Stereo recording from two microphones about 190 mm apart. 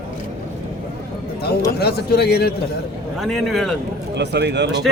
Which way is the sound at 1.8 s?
55° left (ahead or behind).